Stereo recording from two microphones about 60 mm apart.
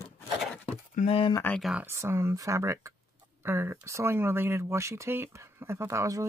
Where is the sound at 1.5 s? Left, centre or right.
Left.